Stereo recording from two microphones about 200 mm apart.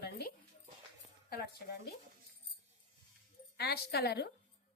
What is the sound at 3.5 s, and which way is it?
Speech, 55° left (ahead or behind).